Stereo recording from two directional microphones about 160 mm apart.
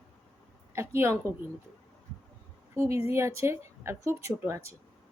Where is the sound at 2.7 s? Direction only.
20° right (ahead or behind).